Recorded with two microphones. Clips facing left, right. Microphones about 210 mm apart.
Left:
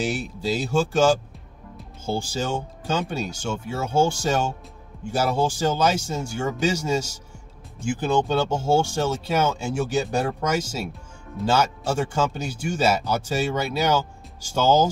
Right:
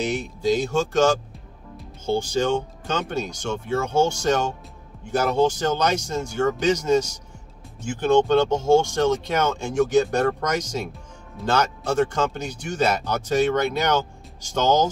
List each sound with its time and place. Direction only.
0.0 s speech: 10° left (ahead or behind)